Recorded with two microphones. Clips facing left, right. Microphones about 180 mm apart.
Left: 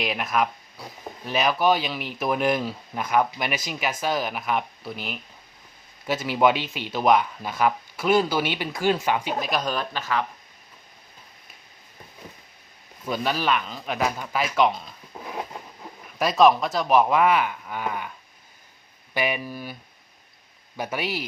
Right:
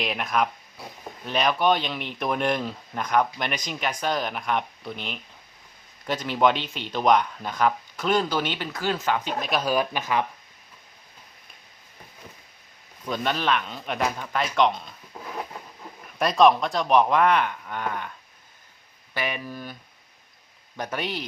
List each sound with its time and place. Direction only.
0.0 s speech: centre (ahead or behind)
9.5 s speech: 5° right (ahead or behind)
13.1 s speech: 5° left (ahead or behind)
16.1 s speech: centre (ahead or behind)
19.1 s speech: 10° left (ahead or behind)
20.7 s speech: 10° left (ahead or behind)